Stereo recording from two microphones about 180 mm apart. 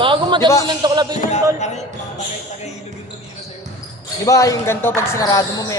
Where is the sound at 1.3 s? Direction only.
40° left (ahead or behind).